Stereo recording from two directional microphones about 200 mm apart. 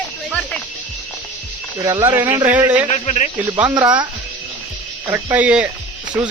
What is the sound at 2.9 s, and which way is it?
Speech, 35° left (ahead or behind).